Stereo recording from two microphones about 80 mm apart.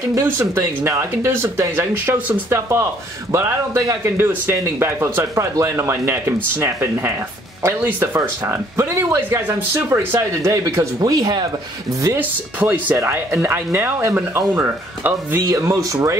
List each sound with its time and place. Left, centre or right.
0.1 s speech: right
4.0 s speech: right
10.5 s speech: right
12.2 s speech: right
15.4 s speech: right